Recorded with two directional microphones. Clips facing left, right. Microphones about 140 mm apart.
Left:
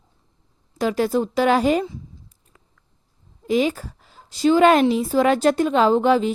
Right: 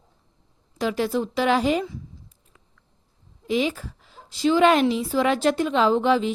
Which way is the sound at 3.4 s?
45° left (ahead or behind).